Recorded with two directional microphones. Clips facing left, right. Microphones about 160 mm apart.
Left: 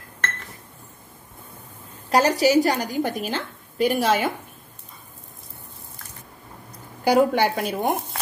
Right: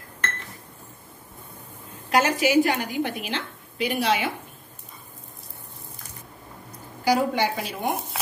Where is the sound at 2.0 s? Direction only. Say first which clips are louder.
Left 3 dB; 35° left (ahead or behind).